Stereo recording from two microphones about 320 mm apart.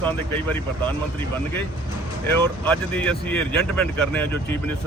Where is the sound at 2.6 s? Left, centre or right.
Centre.